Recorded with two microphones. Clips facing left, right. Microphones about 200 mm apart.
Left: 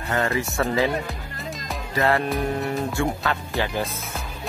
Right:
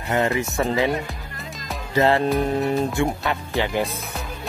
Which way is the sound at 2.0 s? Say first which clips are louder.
Right 4 dB; 25° right (ahead or behind).